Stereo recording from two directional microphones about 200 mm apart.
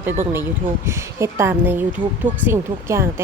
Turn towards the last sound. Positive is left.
turn(degrees=-15)  # may be behind; listen again after turning